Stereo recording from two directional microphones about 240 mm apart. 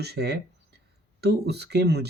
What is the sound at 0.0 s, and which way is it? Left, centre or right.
Speech, right.